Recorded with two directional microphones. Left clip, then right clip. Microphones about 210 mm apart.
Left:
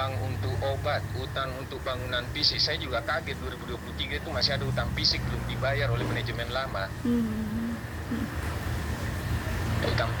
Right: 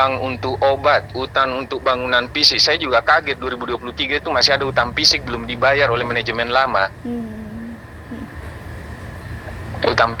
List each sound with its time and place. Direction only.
0.0 s speech: 40° right (ahead or behind)
9.8 s speech: 40° right (ahead or behind)